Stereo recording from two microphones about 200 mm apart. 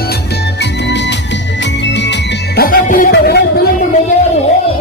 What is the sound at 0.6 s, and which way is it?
Music, 60° left (ahead or behind).